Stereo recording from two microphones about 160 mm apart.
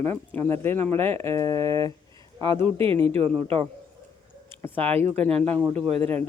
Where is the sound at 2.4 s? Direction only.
35° right (ahead or behind).